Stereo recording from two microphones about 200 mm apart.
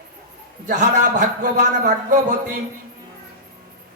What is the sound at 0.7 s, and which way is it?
Speech, 40° right (ahead or behind).